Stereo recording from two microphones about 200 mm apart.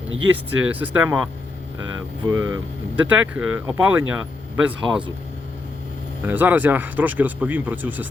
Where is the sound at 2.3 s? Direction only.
15° right (ahead or behind).